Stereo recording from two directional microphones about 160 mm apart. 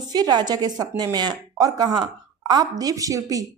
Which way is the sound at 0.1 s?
25° right (ahead or behind).